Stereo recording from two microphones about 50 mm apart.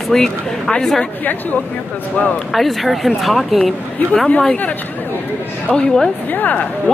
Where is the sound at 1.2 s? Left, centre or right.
Left.